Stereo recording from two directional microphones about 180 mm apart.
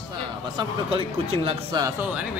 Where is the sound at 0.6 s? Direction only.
30° right (ahead or behind).